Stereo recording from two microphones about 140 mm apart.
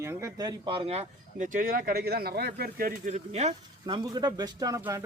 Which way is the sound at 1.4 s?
80° right.